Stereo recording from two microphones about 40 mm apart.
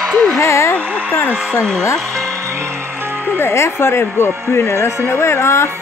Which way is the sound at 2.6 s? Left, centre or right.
Right.